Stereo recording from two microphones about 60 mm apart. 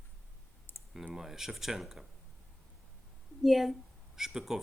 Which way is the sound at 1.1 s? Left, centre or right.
Centre.